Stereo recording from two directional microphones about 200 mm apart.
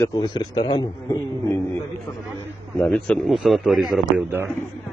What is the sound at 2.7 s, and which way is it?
A man's voice, centre (ahead or behind).